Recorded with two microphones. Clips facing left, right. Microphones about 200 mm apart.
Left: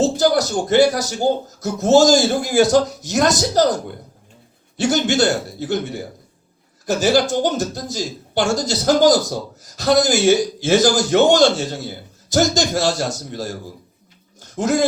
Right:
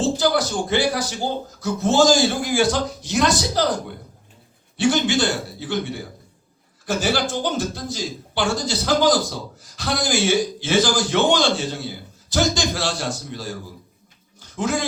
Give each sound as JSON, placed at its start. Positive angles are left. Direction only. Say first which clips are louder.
{"t": 0.0, "sound": "speech", "louder": "left 4 dB", "side_deg": 40}
{"t": 4.8, "sound": "speech", "louder": "left 2 dB", "side_deg": 40}
{"t": 14.3, "sound": "a sound", "louder": "left 5 dB", "side_deg": 40}